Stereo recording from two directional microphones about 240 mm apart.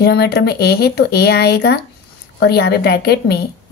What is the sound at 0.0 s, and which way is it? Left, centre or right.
A woman's voice, left.